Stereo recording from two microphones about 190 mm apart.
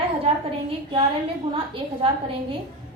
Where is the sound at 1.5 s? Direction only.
30° right (ahead or behind).